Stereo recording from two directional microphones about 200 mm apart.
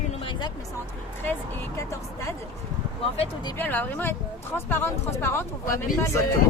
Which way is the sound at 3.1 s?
25° left (ahead or behind).